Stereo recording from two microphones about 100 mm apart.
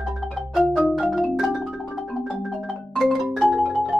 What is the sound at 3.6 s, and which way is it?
Music, centre (ahead or behind).